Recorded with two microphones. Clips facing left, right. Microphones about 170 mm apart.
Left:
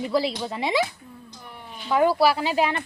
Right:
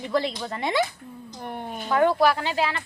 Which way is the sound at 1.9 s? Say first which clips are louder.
Left 1 dB; 5° left (ahead or behind).